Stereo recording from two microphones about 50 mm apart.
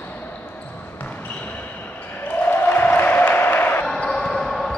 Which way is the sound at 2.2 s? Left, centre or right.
Left.